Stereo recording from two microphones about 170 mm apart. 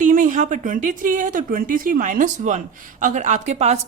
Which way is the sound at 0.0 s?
50° right (ahead or behind).